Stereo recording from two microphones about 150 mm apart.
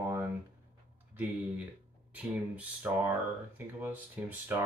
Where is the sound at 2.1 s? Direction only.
10° right (ahead or behind).